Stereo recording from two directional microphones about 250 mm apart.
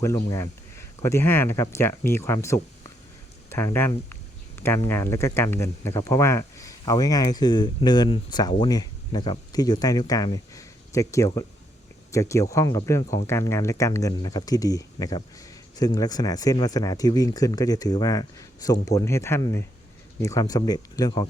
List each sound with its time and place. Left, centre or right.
0.0 s speech: centre